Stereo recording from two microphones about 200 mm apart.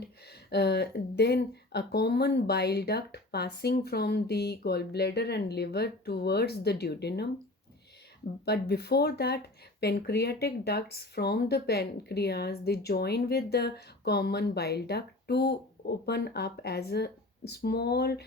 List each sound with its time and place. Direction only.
0.3 s speech: 55° left (ahead or behind)
8.4 s speech: 55° left (ahead or behind)